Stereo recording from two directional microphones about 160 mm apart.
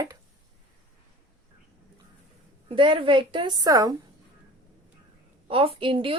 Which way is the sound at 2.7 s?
30° right (ahead or behind).